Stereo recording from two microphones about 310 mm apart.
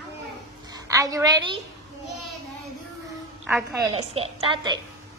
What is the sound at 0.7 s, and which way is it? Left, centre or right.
Speech, centre.